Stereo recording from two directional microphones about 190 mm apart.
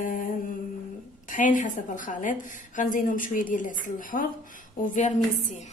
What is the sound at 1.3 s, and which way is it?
A woman's voice, 45° left (ahead or behind).